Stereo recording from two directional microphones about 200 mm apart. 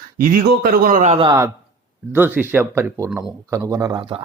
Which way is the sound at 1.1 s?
25° right (ahead or behind).